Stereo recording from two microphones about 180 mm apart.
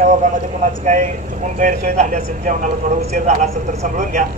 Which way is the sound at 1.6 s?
45° right (ahead or behind).